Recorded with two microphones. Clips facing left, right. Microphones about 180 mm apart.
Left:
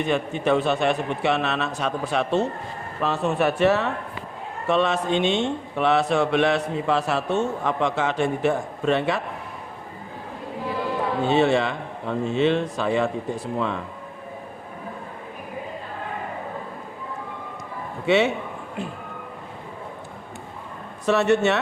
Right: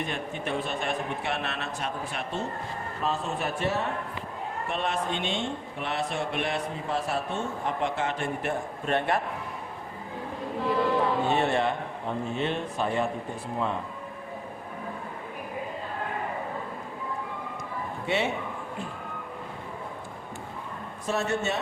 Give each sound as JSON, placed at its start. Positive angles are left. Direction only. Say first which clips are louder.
{"t": 0.1, "sound": "a man's voice", "louder": "left 10 dB", "side_deg": 75}
{"t": 3.0, "sound": "a man's voice", "louder": "left 8 dB", "side_deg": 70}
{"t": 11.3, "sound": "a man's voice", "louder": "left 5 dB", "side_deg": 90}
{"t": 18.0, "sound": "a man's voice", "louder": "left 9 dB", "side_deg": 85}
{"t": 21.1, "sound": "a man's voice", "louder": "left 9 dB", "side_deg": 70}